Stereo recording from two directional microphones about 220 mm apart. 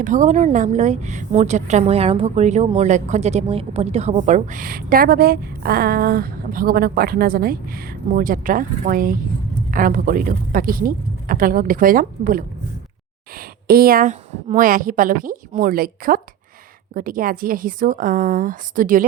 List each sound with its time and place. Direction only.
0.0 s a woman's voice: 35° right (ahead or behind)
13.7 s a woman's voice: 40° right (ahead or behind)